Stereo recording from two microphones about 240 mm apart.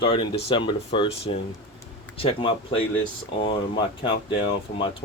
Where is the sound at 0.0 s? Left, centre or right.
Centre.